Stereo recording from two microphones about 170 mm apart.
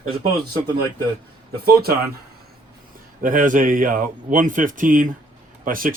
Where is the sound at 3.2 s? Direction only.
50° right (ahead or behind).